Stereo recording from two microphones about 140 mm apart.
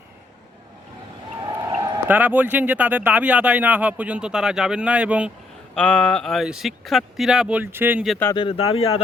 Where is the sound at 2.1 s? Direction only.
10° right (ahead or behind).